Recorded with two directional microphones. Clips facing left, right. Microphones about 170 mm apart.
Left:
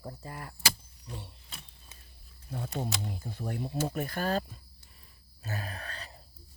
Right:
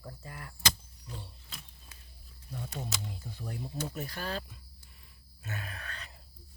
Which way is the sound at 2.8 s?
45° left (ahead or behind).